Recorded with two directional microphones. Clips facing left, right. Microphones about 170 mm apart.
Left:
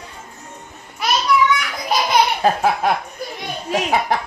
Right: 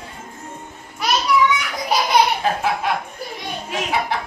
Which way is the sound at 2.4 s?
40° left (ahead or behind).